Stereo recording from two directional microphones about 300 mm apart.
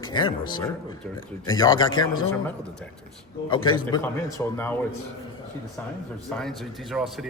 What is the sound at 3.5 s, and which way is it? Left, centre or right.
A man's voice, centre.